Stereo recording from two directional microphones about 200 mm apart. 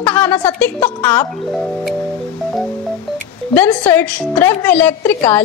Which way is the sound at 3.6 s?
10° left (ahead or behind).